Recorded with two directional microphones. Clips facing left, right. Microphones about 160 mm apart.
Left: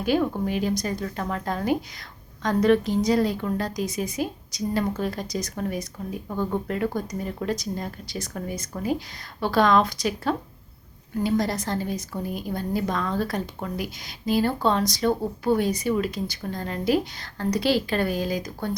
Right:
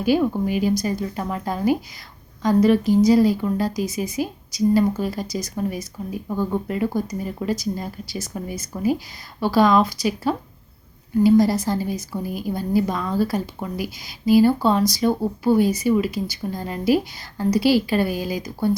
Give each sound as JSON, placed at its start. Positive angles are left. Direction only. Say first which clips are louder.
{"t": 0.0, "sound": "a woman's voice", "louder": "right 4 dB", "side_deg": -5}